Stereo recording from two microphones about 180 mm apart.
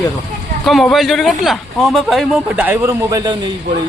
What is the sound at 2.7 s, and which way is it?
Speech, 15° right (ahead or behind).